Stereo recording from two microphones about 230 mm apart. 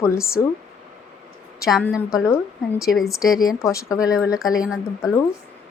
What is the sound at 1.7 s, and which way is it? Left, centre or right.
A woman's voice, centre.